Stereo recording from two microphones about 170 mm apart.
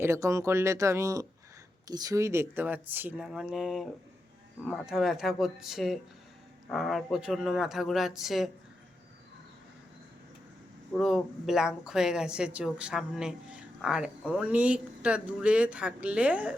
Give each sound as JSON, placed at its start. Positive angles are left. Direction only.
{"t": 0.0, "sound": "speech", "side_deg": -15}
{"t": 10.9, "sound": "speech", "side_deg": 0}